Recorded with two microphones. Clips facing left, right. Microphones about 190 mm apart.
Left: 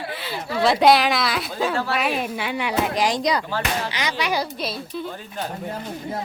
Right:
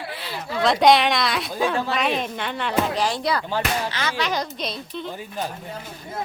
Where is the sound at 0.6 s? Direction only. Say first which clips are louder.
Even; 5° left (ahead or behind).